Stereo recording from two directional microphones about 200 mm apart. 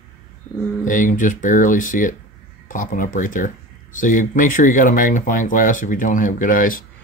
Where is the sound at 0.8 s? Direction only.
40° left (ahead or behind).